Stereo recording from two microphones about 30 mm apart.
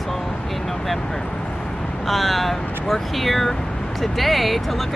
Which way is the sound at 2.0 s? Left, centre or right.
Centre.